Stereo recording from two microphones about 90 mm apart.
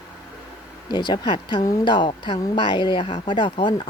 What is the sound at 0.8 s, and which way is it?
Speech, 60° left (ahead or behind).